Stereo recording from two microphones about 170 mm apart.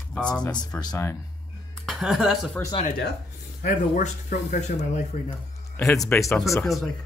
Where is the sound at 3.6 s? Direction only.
45° left (ahead or behind).